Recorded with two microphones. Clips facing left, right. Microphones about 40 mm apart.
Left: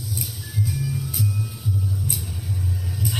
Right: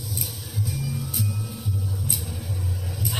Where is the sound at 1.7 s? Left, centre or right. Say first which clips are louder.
Left 5 dB; right.